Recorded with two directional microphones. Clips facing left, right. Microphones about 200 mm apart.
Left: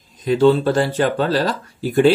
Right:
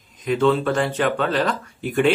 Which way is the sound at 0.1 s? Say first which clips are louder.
Left 4 dB; 35° left (ahead or behind).